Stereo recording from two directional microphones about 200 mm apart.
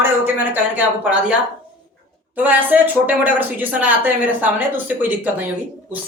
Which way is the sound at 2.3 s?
10° right (ahead or behind).